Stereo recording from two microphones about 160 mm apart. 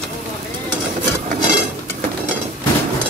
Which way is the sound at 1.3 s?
45° right (ahead or behind).